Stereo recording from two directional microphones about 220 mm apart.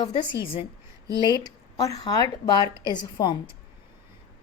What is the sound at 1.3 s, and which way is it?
A woman's voice, 15° left (ahead or behind).